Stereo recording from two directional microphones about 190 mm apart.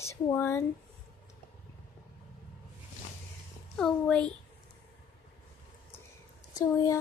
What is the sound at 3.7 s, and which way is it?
Speech, 5° left (ahead or behind).